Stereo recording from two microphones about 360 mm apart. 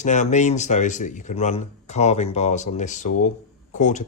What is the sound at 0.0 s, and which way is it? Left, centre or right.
Speech, centre.